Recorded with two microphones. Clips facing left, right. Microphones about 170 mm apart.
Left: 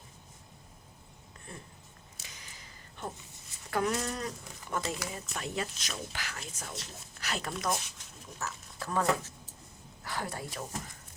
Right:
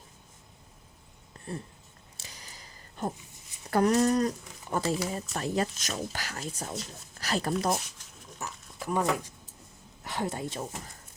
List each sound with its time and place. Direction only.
1.5 s speech: 35° right (ahead or behind)
2.1 s a sound: 35° right (ahead or behind)
3.7 s speech: 40° right (ahead or behind)
8.4 s speech: 15° right (ahead or behind)